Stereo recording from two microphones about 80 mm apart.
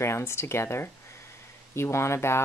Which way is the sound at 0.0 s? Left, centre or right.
Left.